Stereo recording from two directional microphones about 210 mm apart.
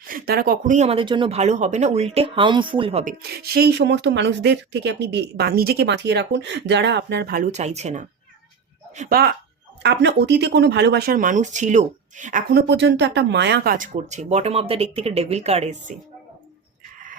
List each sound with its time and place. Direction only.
0.1 s speech: 45° right (ahead or behind); by 3.0 s 25° right (ahead or behind)
3.0 s speech: 45° right (ahead or behind)
7.5 s speech: 30° right (ahead or behind)
9.0 s speech: 45° right (ahead or behind)
9.8 s speech: 55° right (ahead or behind)
13.7 s speech: 35° right (ahead or behind)